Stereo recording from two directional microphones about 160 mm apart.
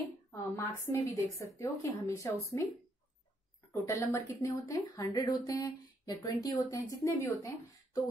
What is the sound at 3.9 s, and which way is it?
Speech, 20° left (ahead or behind).